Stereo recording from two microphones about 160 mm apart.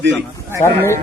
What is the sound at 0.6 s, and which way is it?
Speech, 15° left (ahead or behind).